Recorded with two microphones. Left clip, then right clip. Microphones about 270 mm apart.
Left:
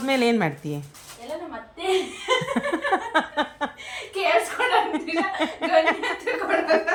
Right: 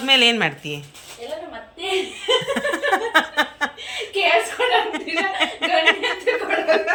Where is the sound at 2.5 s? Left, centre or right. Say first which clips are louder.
Right 3 dB; left.